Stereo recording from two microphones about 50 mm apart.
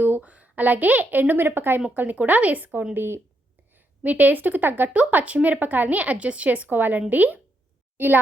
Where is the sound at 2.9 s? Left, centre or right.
Right.